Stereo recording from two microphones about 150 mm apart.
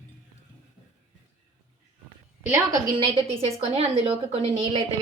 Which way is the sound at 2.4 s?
20° right (ahead or behind).